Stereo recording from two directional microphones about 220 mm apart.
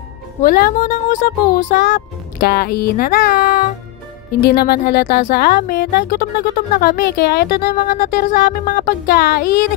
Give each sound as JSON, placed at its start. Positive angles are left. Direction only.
{"t": 0.4, "sound": "speech", "side_deg": 40}